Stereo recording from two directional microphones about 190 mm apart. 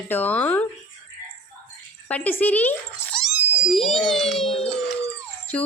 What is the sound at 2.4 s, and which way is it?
Dog, 10° left (ahead or behind).